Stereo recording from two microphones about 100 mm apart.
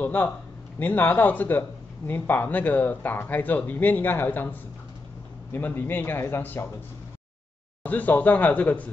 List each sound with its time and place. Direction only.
0.0 s a man's voice: 15° left (ahead or behind)
7.8 s speech: 15° left (ahead or behind)